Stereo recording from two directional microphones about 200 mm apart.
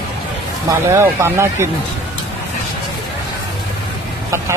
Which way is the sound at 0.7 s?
15° right (ahead or behind).